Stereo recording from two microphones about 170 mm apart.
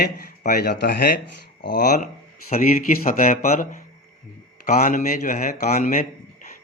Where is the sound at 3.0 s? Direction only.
50° left (ahead or behind).